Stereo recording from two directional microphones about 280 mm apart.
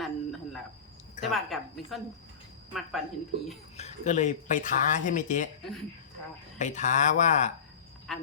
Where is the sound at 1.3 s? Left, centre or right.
Centre.